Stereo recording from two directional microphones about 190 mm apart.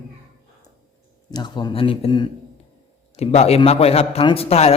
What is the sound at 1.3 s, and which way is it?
A man's voice, 20° left (ahead or behind).